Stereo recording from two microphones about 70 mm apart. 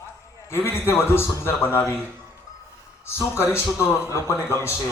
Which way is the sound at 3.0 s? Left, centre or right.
Left.